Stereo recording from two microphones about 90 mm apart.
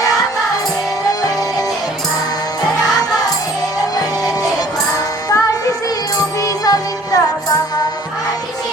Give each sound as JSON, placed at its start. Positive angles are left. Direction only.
{"t": 2.9, "sound": "music", "side_deg": 45}
{"t": 5.3, "sound": "music", "side_deg": 40}